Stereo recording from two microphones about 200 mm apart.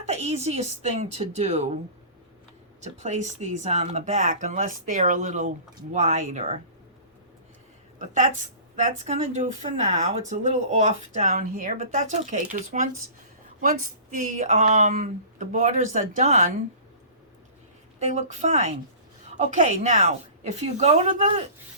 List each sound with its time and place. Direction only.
0.0 s speech: 35° right (ahead or behind)
2.8 s speech: 35° right (ahead or behind)
7.9 s speech: 40° right (ahead or behind)
14.1 s speech: 40° right (ahead or behind)
18.0 s speech: 35° right (ahead or behind)